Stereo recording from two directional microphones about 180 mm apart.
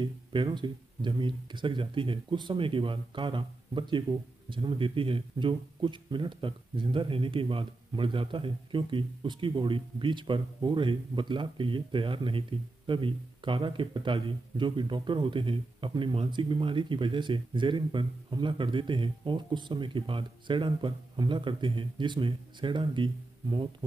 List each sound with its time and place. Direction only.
0.0 s speech: 25° right (ahead or behind)